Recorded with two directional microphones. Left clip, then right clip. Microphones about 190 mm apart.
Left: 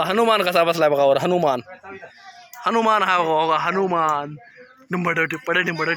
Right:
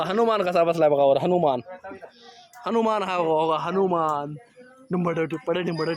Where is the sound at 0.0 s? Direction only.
30° left (ahead or behind).